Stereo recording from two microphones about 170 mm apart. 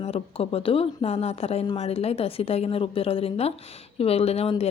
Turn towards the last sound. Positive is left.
turn(degrees=35)  # may be behind; listen again after turning